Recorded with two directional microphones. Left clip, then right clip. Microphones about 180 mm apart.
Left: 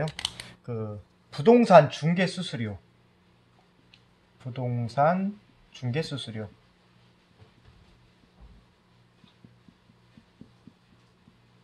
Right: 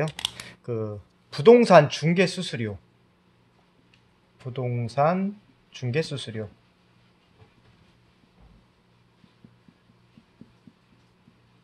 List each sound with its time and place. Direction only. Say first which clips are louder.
0.5 s computer keyboard: right 5 dB; 55° right (ahead or behind)
1.3 s speech: right 2 dB; 55° right (ahead or behind)
4.4 s speech: right 3 dB; 45° right (ahead or behind)